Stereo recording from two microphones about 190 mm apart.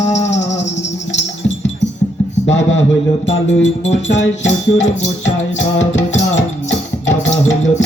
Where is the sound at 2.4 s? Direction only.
80° left.